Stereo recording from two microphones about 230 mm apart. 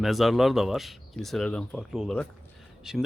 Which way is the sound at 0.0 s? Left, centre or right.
Centre.